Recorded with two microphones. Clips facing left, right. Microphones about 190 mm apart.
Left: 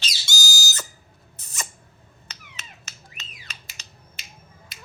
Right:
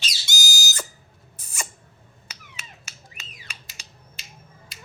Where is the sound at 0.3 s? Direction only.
20° right (ahead or behind).